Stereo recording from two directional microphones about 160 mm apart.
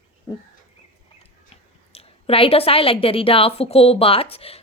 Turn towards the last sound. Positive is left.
turn(degrees=40)  # may be behind; listen again after turning